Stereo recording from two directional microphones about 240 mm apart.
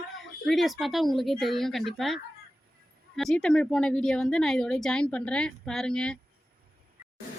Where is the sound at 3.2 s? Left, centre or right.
Centre.